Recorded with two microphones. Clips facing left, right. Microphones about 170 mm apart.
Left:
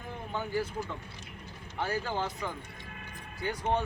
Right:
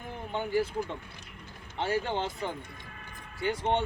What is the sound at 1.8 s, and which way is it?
Speech, 25° right (ahead or behind).